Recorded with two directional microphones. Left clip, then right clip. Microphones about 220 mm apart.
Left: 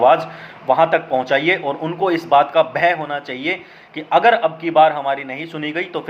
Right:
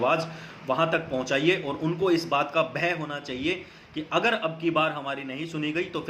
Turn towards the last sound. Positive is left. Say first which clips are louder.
# left 6 dB
turn(degrees=-15)  # may be behind; listen again after turning